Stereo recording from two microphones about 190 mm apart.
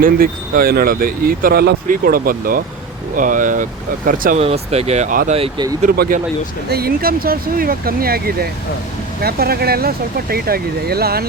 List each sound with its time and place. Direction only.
0.0 s speech: 50° right (ahead or behind)
4.4 s speech: 35° right (ahead or behind)
5.3 s speech: 30° right (ahead or behind)
6.7 s speech: 55° right (ahead or behind)